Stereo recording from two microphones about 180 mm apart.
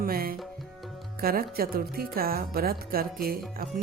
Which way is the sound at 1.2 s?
55° right (ahead or behind).